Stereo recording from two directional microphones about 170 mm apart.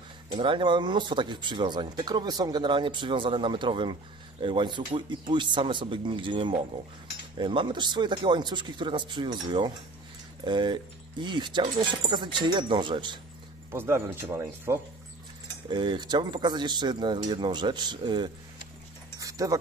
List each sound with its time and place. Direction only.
0.3 s speech: 30° right (ahead or behind)
13.7 s speech: 15° right (ahead or behind)
15.7 s speech: 25° right (ahead or behind)
19.1 s dog: 20° right (ahead or behind)